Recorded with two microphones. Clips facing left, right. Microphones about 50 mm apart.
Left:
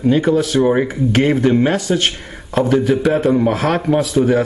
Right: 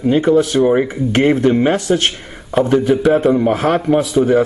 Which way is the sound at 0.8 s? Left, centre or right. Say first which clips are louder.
Right 1 dB; centre.